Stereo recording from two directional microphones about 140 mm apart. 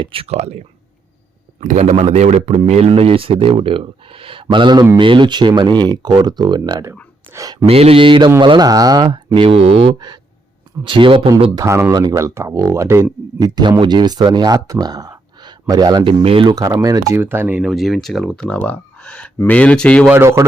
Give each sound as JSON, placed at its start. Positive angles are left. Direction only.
{"t": 0.0, "sound": "speech", "side_deg": -40}
{"t": 1.6, "sound": "a man's voice", "side_deg": -55}
{"t": 7.7, "sound": "speech", "side_deg": -45}
{"t": 11.5, "sound": "speech", "side_deg": -20}
{"t": 13.6, "sound": "speech", "side_deg": -30}
{"t": 16.5, "sound": "speech", "side_deg": -25}
{"t": 17.6, "sound": "speech", "side_deg": 0}
{"t": 20.1, "sound": "speech", "side_deg": -20}